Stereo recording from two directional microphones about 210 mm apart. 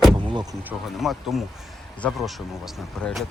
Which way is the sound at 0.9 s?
Centre (ahead or behind).